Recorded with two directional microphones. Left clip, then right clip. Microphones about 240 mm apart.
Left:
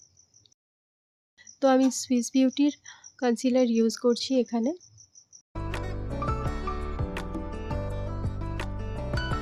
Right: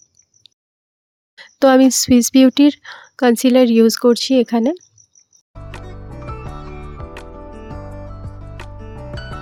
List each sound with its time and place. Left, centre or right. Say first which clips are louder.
0.4 s a sound: right 13 dB; right
1.4 s speech: right 11 dB; right
5.6 s music: even; centre